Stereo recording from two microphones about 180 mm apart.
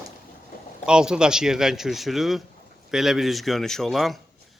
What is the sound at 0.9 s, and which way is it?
Speech, 5° right (ahead or behind).